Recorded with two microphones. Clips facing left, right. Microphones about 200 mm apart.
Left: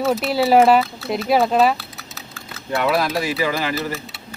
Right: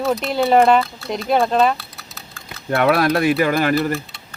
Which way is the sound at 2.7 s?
55° right (ahead or behind).